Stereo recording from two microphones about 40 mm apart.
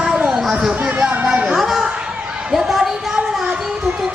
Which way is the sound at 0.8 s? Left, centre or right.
Right.